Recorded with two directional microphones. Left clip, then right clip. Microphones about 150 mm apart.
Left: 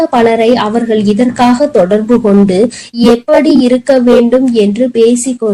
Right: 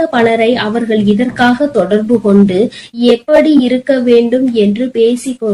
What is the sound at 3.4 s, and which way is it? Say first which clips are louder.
Speech: left 1 dB; 30° left (ahead or behind).